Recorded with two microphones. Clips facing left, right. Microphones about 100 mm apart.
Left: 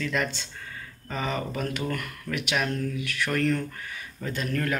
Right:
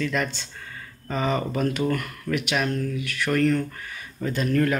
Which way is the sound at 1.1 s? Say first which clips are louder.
Right 5 dB; 20° right (ahead or behind).